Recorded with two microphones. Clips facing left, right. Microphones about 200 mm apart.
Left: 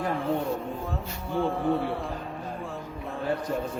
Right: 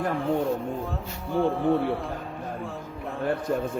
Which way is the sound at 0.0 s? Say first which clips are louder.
Right 2 dB; centre (ahead or behind).